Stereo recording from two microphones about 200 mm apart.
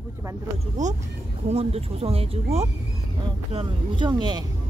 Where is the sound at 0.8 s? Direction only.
40° right (ahead or behind).